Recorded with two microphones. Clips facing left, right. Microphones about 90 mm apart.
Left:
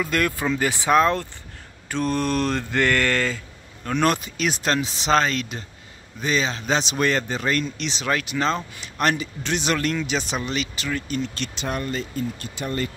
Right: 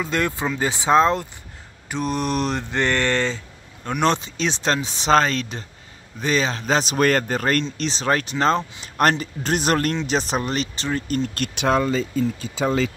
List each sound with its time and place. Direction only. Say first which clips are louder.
0.0 s mantra: even; 20° right (ahead or behind)
4.0 s speech: right 1 dB; 30° right (ahead or behind); by 7.6 s 45° right (ahead or behind)
7.7 s speech: right 3 dB; 35° right (ahead or behind)
12.6 s speech: right 6 dB; 90° right